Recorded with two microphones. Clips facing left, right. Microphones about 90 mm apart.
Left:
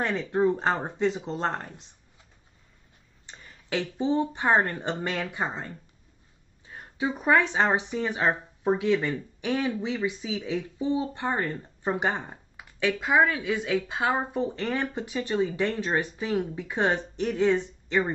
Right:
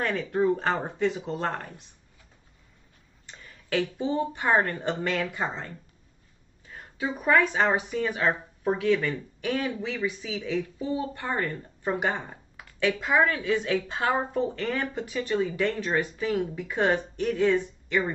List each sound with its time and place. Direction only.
0.3 s a woman's voice: 20° left (ahead or behind)
3.3 s a sound: 20° left (ahead or behind)
4.0 s a woman's voice: 25° left (ahead or behind)